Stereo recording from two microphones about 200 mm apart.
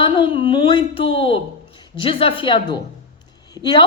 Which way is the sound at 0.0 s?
25° left (ahead or behind).